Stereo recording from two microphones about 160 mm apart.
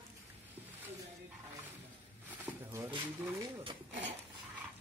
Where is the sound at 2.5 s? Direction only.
15° right (ahead or behind).